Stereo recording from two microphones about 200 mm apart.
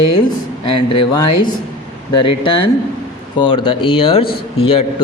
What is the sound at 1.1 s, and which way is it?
Speech, 20° left (ahead or behind).